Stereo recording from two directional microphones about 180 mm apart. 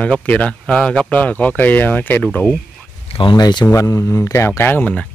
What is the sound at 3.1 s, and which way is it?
A man's voice, 25° left (ahead or behind).